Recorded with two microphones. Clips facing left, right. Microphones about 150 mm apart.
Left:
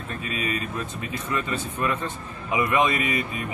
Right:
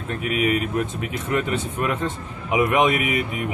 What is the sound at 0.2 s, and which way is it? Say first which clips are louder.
Speech: right 8 dB; 15° right (ahead or behind).